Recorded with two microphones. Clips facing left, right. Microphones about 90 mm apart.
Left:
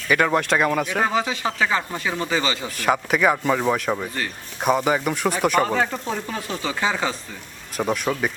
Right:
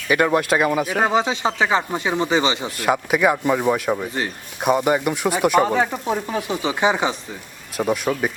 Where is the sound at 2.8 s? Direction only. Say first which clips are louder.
Even; 5° right (ahead or behind).